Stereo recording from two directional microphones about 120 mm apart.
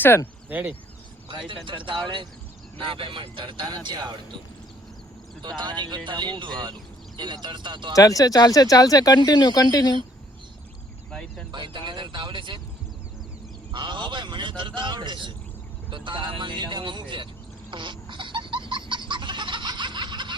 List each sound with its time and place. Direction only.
0.0 s speech: 20° left (ahead or behind)
0.4 s speech: 15° right (ahead or behind)
1.6 s speech: 45° right (ahead or behind)
5.4 s speech: 40° right (ahead or behind)
7.9 s speech: 30° left (ahead or behind)
11.1 s speech: 5° left (ahead or behind)
11.5 s speech: 40° right (ahead or behind)
13.7 s speech: 40° right (ahead or behind)
17.7 s a sound: 40° right (ahead or behind)